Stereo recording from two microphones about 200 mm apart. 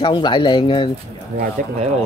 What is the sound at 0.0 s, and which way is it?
Speech, 25° left (ahead or behind).